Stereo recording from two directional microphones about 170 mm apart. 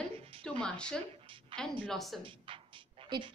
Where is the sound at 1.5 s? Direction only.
30° right (ahead or behind).